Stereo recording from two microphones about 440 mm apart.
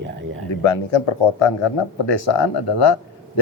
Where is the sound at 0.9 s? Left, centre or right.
Left.